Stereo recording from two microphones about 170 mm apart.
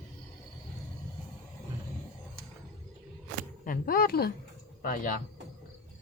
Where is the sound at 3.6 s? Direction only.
55° left (ahead or behind).